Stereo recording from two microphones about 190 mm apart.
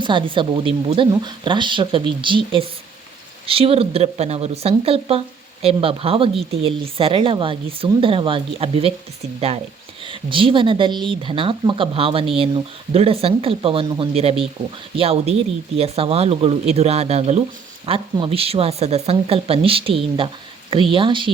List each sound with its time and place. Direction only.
0.0 s speech: 25° right (ahead or behind)